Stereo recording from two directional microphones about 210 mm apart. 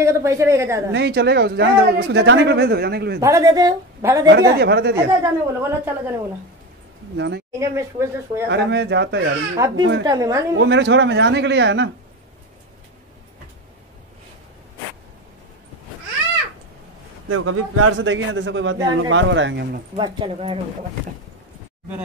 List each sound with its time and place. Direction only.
0.0 s a woman's voice: 15° right (ahead or behind)
0.9 s speech: 55° right (ahead or behind)
3.2 s a woman's voice: 15° right (ahead or behind)
4.3 s speech: 55° right (ahead or behind)
5.2 s a woman's voice: 10° right (ahead or behind)
7.2 s a man's voice: 55° right (ahead or behind)
7.5 s a woman's voice: 15° right (ahead or behind)
8.5 s a man's voice: 55° right (ahead or behind)
10.0 s a woman's voice: 15° right (ahead or behind)
10.6 s a man's voice: 60° right (ahead or behind)
17.3 s a man's voice: 90° right; by 19.8 s 50° right (ahead or behind)
20.0 s speech: 25° right (ahead or behind)